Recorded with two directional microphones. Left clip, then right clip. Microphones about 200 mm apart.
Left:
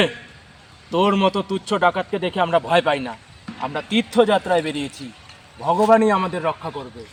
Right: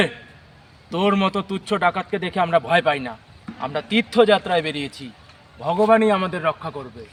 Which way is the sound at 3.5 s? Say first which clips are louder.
Left 2 dB; 60° right (ahead or behind).